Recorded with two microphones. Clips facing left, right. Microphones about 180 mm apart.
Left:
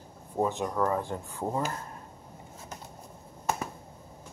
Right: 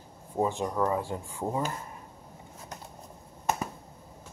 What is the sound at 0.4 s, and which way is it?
Speech, 10° right (ahead or behind).